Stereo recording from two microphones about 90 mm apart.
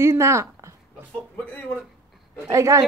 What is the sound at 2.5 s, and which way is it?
Speech, 35° right (ahead or behind).